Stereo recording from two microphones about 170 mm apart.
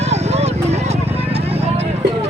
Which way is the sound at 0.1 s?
40° right (ahead or behind).